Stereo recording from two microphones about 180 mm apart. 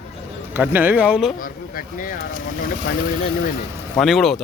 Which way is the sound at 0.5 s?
10° right (ahead or behind).